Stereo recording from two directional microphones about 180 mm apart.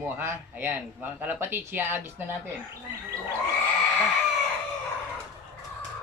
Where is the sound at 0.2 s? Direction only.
10° right (ahead or behind).